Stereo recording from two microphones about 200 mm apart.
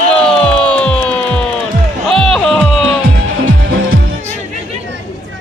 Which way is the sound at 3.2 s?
80° right.